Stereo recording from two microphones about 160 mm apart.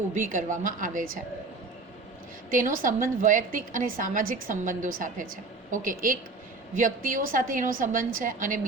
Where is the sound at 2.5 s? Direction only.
60° right (ahead or behind).